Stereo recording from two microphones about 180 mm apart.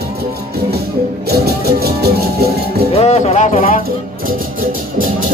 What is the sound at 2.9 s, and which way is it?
Music, 35° left (ahead or behind).